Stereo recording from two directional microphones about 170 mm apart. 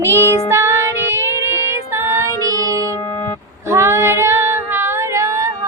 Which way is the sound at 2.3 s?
20° left (ahead or behind).